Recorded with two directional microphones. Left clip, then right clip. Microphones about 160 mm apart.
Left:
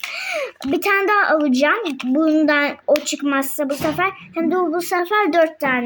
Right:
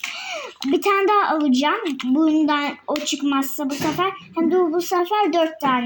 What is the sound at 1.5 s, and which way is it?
Speech, 35° left (ahead or behind).